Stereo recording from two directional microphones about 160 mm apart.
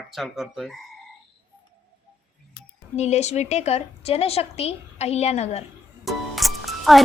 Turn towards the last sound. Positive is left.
turn(degrees=0)  # may be behind; listen again after turning